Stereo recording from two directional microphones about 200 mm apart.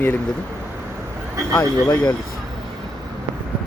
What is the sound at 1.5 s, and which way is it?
Speech, 15° left (ahead or behind).